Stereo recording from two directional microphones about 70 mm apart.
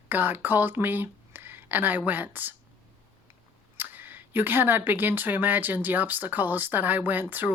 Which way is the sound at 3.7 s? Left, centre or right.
Right.